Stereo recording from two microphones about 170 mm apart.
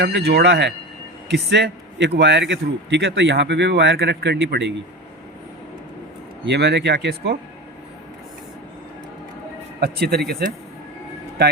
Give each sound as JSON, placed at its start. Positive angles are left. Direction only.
{"t": 0.0, "sound": "a man's voice", "side_deg": -75}
{"t": 6.4, "sound": "speech", "side_deg": -85}
{"t": 9.8, "sound": "speech", "side_deg": -70}